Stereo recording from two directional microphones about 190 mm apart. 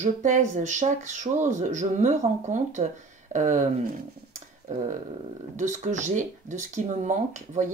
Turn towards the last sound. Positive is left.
turn(degrees=-40)  # may be behind; listen again after turning